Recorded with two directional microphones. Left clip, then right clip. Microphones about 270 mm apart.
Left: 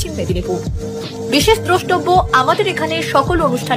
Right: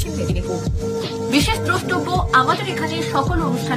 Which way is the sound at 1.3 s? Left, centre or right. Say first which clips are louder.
Left 7 dB; centre.